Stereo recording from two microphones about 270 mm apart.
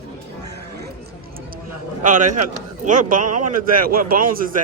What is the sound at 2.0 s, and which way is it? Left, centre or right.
Speech, right.